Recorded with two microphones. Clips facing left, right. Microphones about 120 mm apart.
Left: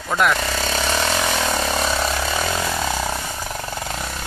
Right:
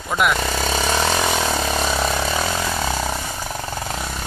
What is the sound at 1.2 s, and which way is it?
Vehicle, centre (ahead or behind).